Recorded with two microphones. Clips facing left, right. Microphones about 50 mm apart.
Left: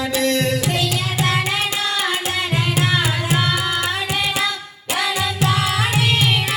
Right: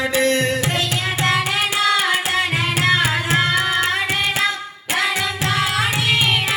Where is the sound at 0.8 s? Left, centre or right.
Right.